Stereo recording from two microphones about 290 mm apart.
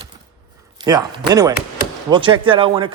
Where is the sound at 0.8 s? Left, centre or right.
Centre.